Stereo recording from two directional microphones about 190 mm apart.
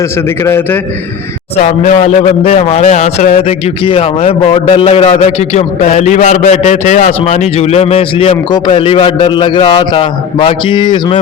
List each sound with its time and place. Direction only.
0.4 s a man's voice: 10° left (ahead or behind)
1.6 s a man's voice: 35° left (ahead or behind)